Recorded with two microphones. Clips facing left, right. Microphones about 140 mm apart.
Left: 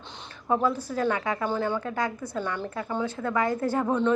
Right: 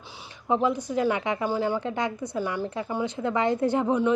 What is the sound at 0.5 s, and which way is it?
A woman's voice, 20° right (ahead or behind).